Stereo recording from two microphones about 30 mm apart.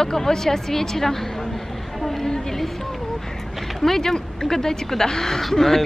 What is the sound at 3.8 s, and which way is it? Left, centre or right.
A woman's voice, centre.